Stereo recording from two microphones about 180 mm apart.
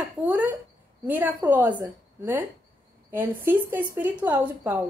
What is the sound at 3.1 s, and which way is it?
A woman's voice, 10° right (ahead or behind).